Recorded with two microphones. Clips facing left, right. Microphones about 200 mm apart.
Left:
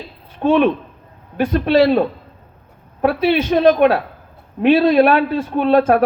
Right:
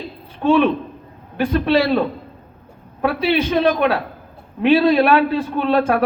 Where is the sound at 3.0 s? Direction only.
45° left (ahead or behind).